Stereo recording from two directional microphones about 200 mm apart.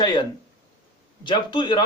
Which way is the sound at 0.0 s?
20° left (ahead or behind).